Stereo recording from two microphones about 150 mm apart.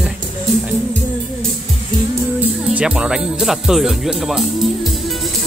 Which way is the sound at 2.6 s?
5° right (ahead or behind).